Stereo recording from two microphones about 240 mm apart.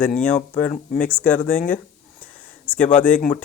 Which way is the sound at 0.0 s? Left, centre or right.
Centre.